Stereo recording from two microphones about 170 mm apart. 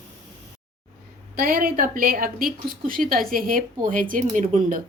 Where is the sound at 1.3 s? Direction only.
55° right (ahead or behind).